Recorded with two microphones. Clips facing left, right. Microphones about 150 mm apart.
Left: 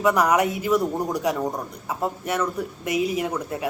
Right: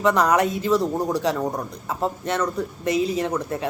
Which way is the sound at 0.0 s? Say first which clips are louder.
Right 1 dB; 10° left (ahead or behind).